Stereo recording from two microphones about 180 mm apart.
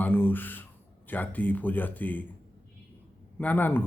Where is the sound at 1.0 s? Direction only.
10° left (ahead or behind).